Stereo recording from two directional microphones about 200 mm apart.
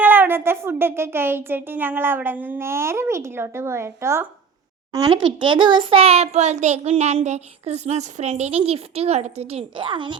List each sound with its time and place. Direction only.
0.0 s a child's voice: 10° right (ahead or behind); by 10.2 s 25° right (ahead or behind)